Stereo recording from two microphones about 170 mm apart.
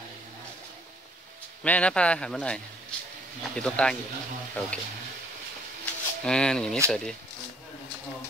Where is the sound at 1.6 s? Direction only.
5° left (ahead or behind).